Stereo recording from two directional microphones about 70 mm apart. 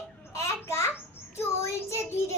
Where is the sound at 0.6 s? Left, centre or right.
Left.